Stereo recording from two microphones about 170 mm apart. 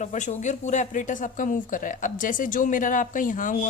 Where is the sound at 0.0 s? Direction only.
45° left (ahead or behind).